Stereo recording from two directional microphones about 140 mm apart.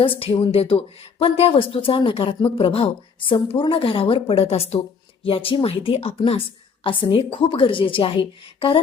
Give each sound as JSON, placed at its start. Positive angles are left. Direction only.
{"t": 0.0, "sound": "a woman's voice", "side_deg": 40}